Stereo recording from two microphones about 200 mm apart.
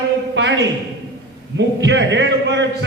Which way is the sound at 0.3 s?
65° right (ahead or behind).